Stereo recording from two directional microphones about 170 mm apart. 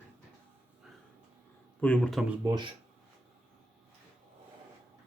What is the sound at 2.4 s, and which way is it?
Speech, 20° right (ahead or behind).